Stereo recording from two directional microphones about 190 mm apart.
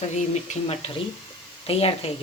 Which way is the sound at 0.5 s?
35° left (ahead or behind).